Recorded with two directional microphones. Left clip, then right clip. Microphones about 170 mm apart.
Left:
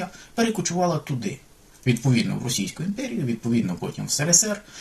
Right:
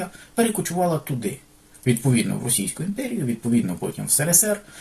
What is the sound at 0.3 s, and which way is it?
Speech, 25° left (ahead or behind).